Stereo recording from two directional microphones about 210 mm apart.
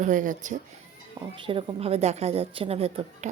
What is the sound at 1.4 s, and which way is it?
A woman's voice, 25° right (ahead or behind).